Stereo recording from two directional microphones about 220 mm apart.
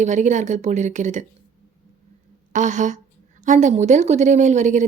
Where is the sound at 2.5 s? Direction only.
35° right (ahead or behind).